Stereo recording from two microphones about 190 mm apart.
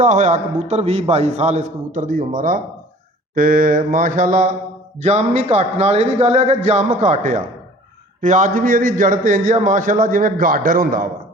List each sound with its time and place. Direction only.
0.0 s a man's voice: 40° right (ahead or behind)